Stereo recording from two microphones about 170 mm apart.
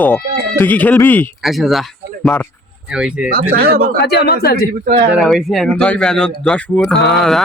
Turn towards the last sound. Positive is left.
turn(degrees=0)  # may be behind; listen again after turning